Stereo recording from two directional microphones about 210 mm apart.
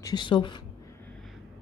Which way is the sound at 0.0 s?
20° left (ahead or behind).